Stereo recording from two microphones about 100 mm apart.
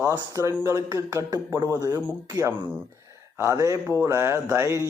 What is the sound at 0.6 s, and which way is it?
Speech, 30° right (ahead or behind).